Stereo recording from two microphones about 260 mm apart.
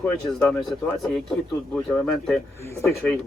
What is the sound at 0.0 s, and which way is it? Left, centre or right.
Speech, centre.